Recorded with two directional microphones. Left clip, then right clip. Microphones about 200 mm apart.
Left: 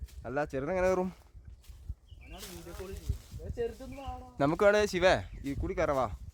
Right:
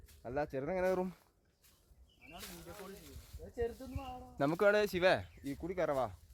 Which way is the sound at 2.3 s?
25° left (ahead or behind).